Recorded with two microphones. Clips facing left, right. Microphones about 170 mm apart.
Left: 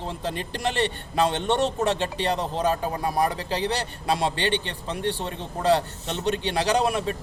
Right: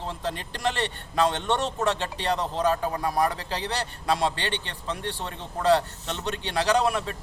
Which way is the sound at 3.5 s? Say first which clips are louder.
Left 4 dB; 15° left (ahead or behind).